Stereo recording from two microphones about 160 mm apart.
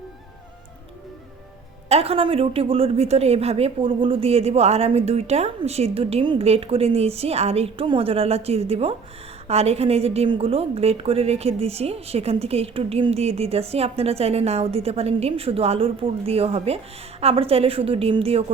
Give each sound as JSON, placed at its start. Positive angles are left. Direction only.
{"t": 1.9, "sound": "a woman's voice", "side_deg": -40}